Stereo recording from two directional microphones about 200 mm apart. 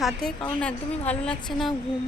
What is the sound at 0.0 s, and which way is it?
A woman's voice, centre (ahead or behind).